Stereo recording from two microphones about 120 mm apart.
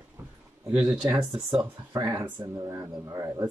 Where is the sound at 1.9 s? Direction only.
25° right (ahead or behind).